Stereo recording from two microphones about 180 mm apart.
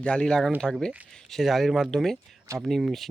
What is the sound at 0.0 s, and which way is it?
Speech, 5° left (ahead or behind).